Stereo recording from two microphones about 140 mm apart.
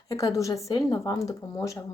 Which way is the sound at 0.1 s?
25° left (ahead or behind).